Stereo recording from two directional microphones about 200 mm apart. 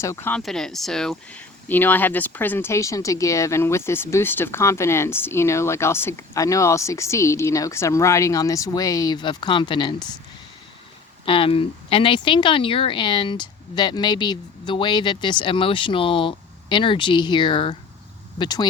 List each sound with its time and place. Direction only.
0.0 s speech: 15° left (ahead or behind)
11.3 s speech: 25° left (ahead or behind)